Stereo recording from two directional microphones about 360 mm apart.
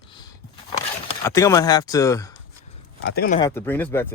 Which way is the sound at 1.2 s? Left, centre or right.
Centre.